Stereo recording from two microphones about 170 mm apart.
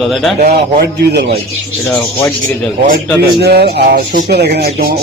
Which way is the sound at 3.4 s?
70° right (ahead or behind).